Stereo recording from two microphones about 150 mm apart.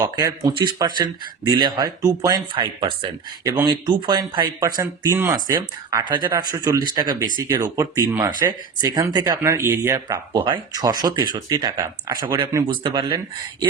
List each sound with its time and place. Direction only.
0.0 s speech: 25° right (ahead or behind)
4.8 s speech: 15° right (ahead or behind)
9.4 s speech: 15° right (ahead or behind)
12.8 s speech: 30° right (ahead or behind)